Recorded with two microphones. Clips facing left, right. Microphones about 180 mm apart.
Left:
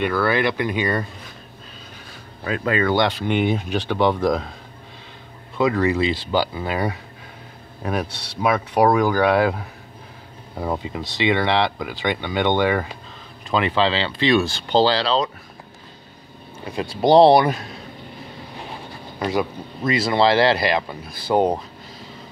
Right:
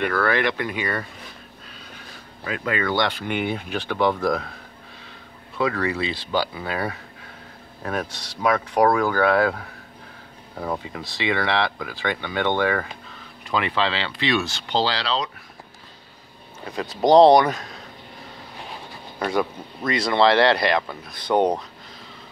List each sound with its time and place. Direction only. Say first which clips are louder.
0.1 s speech: left 2 dB; 5° left (ahead or behind)
0.6 s speech: left 5 dB; 20° left (ahead or behind)
2.4 s speech: left 4 dB; 35° left (ahead or behind)
5.6 s speech: left 5 dB; 20° left (ahead or behind)
13.5 s speech: left 4 dB; 30° left (ahead or behind)
16.7 s speech: left 1 dB; 10° left (ahead or behind)
19.9 s speech: left 1 dB; 5° left (ahead or behind)